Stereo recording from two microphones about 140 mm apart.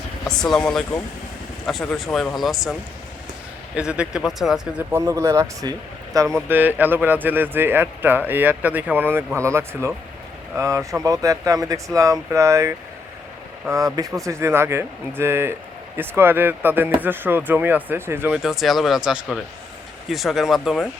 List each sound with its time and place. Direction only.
0.3 s speech: 5° left (ahead or behind)
2.0 s speech: 5° left (ahead or behind)
3.8 s speech: 5° right (ahead or behind)
18.4 s speech: centre (ahead or behind)